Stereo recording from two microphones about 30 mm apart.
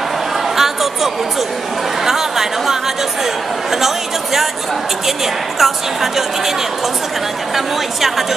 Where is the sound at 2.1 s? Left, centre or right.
Centre.